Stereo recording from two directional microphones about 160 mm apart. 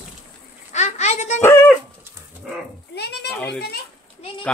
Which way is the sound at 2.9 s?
90° left.